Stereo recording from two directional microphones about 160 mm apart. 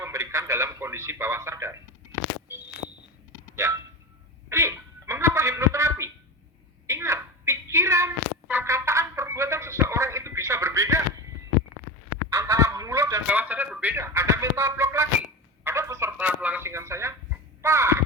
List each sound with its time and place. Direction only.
0.0 s a man's voice: 20° right (ahead or behind)
3.5 s speech: 20° right (ahead or behind)
6.8 s a sound: 20° right (ahead or behind)
12.3 s goose: 15° right (ahead or behind)
13.2 s speech: 10° right (ahead or behind)